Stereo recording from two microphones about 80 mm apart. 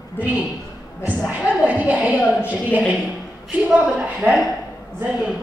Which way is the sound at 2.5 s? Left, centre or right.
Centre.